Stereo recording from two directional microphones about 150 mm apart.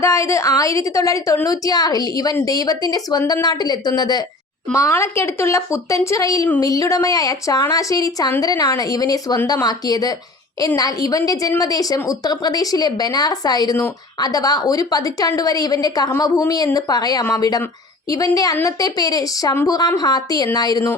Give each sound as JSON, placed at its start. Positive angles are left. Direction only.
{"t": 0.0, "sound": "a woman's voice", "side_deg": 20}